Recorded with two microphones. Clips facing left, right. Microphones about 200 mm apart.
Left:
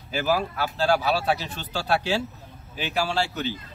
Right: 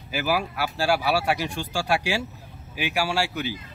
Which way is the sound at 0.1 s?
10° right (ahead or behind).